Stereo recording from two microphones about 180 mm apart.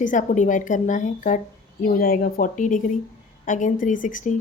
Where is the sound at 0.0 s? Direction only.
45° left (ahead or behind).